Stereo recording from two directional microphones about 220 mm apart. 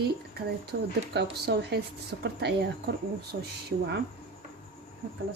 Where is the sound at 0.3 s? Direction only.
45° right (ahead or behind).